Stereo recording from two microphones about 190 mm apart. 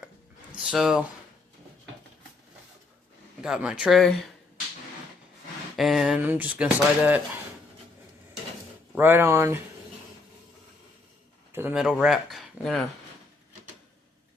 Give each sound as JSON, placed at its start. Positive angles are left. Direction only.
{"t": 0.5, "sound": "speech", "side_deg": -5}
{"t": 3.4, "sound": "speech", "side_deg": -5}
{"t": 5.7, "sound": "speech", "side_deg": 0}
{"t": 9.0, "sound": "speech", "side_deg": -10}
{"t": 11.5, "sound": "speech", "side_deg": -5}